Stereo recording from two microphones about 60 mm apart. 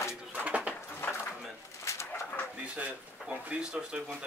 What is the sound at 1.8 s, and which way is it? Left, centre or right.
Pigeon, left.